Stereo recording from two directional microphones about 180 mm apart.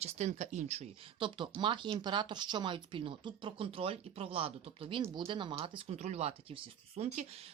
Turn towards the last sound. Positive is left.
turn(degrees=-40)  # may be behind; listen again after turning